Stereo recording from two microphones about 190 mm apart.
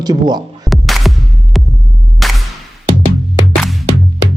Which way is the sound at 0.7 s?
Centre (ahead or behind).